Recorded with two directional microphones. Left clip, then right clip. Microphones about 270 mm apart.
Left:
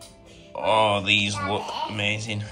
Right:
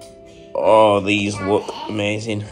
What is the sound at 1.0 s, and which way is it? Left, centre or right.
Speech, centre.